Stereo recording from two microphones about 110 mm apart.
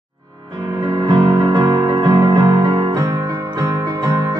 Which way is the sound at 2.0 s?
35° right (ahead or behind).